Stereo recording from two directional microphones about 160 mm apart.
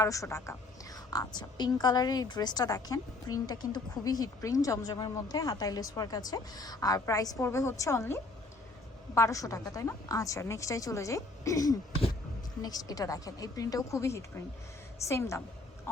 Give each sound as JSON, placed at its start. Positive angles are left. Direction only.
{"t": 0.0, "sound": "a woman's voice", "side_deg": 20}